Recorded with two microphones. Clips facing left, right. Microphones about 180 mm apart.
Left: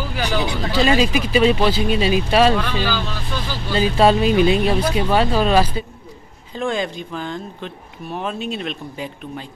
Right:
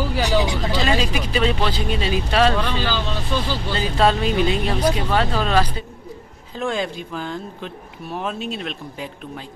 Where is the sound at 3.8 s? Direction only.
10° left (ahead or behind).